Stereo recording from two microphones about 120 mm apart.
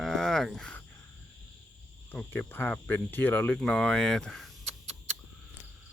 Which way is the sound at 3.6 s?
5° left (ahead or behind).